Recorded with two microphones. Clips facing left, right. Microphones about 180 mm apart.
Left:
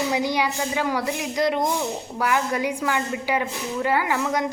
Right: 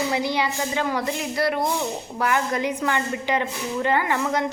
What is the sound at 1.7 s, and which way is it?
A woman's voice, centre (ahead or behind).